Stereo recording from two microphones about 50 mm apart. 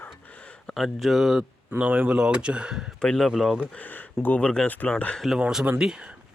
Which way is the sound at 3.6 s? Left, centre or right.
Left.